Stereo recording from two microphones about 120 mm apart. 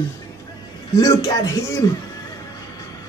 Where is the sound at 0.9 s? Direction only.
30° left (ahead or behind).